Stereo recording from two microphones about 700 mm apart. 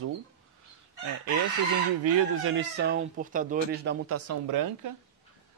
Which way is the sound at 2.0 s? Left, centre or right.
Centre.